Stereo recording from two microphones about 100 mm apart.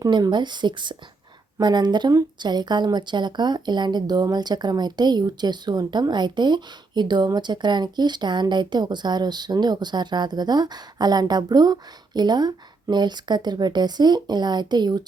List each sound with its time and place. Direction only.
0.0 s a woman's voice: 45° right (ahead or behind)